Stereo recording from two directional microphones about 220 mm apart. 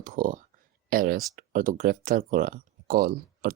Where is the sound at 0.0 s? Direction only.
40° right (ahead or behind).